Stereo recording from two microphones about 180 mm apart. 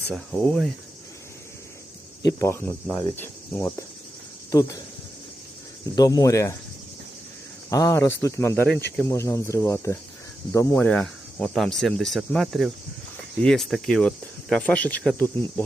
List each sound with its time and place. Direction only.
0.1 s speech: centre (ahead or behind)
2.2 s speech: 15° left (ahead or behind)
6.0 s speech: 20° left (ahead or behind)
7.7 s speech: 15° left (ahead or behind)